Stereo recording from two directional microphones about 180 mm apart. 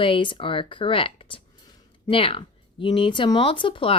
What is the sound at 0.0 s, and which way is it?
Speech, 25° left (ahead or behind).